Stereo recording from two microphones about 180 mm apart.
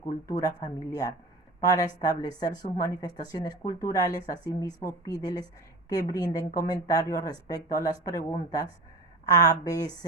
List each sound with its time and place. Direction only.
0.3 s a woman's voice: 20° left (ahead or behind)